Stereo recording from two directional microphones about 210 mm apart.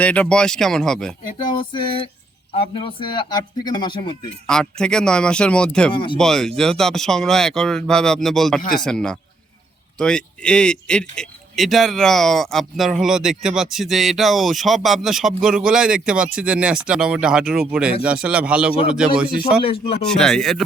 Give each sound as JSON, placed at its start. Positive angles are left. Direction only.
{"t": 0.0, "sound": "speech", "side_deg": 5}
{"t": 1.5, "sound": "speech", "side_deg": 25}
{"t": 4.4, "sound": "speech", "side_deg": 5}
{"t": 5.9, "sound": "speech", "side_deg": 25}
{"t": 6.1, "sound": "speech", "side_deg": 0}